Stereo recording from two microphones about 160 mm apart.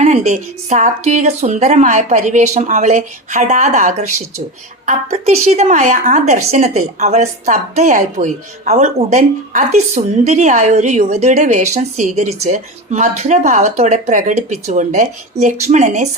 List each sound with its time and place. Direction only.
0.0 s a woman's voice: 45° right (ahead or behind)